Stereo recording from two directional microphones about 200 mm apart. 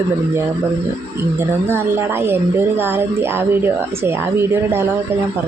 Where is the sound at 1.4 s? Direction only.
10° right (ahead or behind).